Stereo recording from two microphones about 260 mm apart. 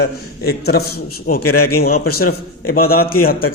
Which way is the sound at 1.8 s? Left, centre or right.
Left.